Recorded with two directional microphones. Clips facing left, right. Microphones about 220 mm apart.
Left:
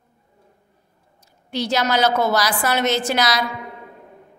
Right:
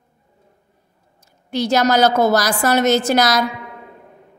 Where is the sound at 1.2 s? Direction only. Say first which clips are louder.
Right 4 dB; 45° right (ahead or behind).